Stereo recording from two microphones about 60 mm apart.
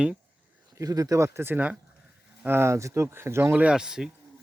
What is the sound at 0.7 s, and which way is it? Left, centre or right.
Speech, right.